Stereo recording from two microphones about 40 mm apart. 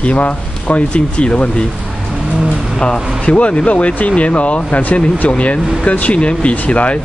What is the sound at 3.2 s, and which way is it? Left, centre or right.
Speech, left.